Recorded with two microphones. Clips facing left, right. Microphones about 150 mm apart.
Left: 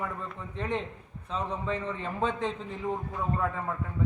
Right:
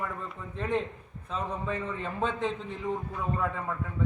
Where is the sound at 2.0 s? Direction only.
Centre (ahead or behind).